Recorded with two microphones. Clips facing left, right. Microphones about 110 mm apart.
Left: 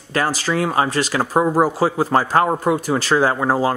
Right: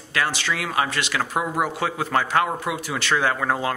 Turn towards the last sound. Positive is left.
turn(degrees=30)  # may be behind; listen again after turning